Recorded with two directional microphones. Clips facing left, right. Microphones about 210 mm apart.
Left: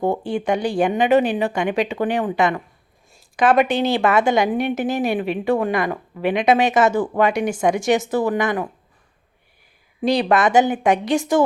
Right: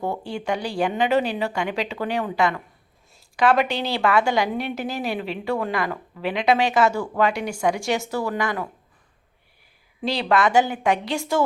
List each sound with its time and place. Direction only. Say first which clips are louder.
0.0 s a woman's voice: left 6 dB; 20° left (ahead or behind)
10.0 s a woman's voice: left 4 dB; 20° left (ahead or behind)